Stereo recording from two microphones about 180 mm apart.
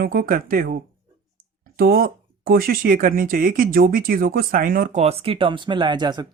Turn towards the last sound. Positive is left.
turn(degrees=-25)  # may be behind; listen again after turning